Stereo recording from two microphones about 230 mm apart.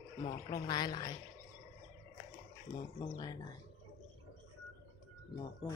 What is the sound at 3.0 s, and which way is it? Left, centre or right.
Speech, centre.